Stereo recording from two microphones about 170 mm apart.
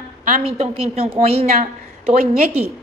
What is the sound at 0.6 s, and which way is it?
A woman's voice, 40° right (ahead or behind).